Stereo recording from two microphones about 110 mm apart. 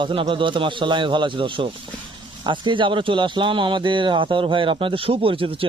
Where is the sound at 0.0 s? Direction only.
50° right (ahead or behind).